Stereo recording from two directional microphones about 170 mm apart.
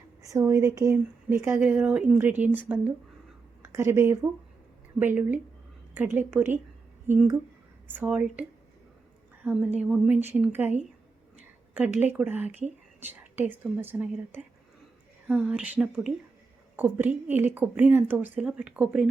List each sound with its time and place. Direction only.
0.3 s speech: 20° right (ahead or behind)
3.6 s speech: 15° right (ahead or behind)
7.9 s a woman's voice: 10° right (ahead or behind)